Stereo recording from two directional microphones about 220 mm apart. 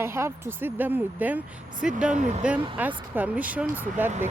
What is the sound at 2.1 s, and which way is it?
Speech, 35° right (ahead or behind).